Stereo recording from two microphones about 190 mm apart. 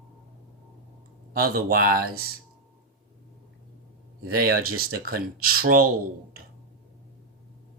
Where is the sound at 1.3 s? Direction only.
50° right (ahead or behind).